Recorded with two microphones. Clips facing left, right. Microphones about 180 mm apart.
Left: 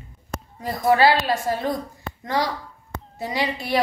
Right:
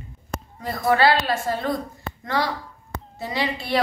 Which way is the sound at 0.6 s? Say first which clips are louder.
Left 1 dB; 15° left (ahead or behind).